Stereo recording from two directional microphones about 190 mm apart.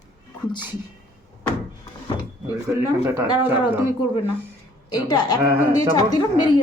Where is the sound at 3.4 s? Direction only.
10° right (ahead or behind).